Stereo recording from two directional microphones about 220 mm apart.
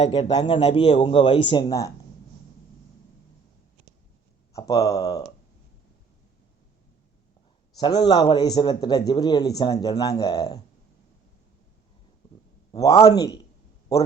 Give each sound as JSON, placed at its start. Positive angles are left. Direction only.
{"t": 0.0, "sound": "speech", "side_deg": 25}
{"t": 4.5, "sound": "speech", "side_deg": 15}
{"t": 7.8, "sound": "speech", "side_deg": 20}
{"t": 12.7, "sound": "speech", "side_deg": 15}